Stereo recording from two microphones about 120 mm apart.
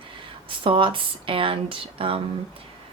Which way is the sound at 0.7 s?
45° right (ahead or behind).